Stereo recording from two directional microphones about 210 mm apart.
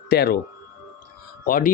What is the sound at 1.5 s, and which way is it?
Speech, 40° left (ahead or behind).